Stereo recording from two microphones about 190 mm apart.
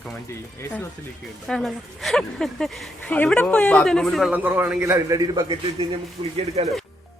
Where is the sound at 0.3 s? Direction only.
15° left (ahead or behind).